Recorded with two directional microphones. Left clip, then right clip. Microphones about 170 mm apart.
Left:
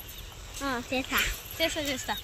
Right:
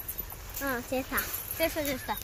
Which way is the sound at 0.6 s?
40° left (ahead or behind).